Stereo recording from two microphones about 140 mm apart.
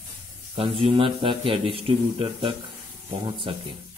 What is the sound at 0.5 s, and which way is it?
A man's voice, 45° right (ahead or behind).